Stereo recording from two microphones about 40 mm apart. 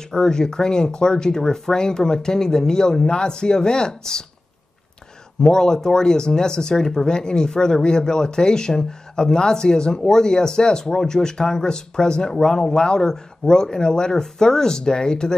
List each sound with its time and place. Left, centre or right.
0.1 s speech: centre
5.4 s speech: centre